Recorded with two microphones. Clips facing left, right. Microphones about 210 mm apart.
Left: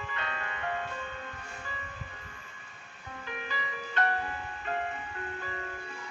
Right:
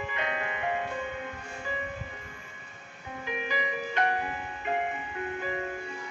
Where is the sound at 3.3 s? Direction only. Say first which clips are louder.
Right 7 dB; 15° right (ahead or behind).